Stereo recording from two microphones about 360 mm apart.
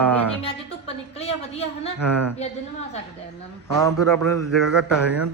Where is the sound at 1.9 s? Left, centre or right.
Right.